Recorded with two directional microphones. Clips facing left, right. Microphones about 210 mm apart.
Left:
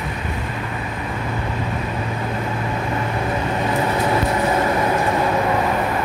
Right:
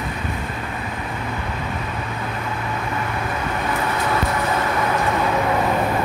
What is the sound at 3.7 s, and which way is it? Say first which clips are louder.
Vehicle: left 3 dB; 25° left (ahead or behind).